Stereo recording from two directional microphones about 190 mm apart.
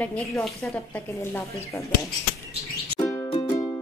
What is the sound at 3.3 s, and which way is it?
Music, 30° left (ahead or behind).